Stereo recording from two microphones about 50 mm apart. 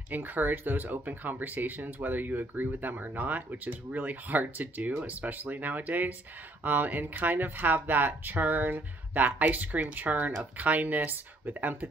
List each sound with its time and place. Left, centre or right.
0.1 s speech: right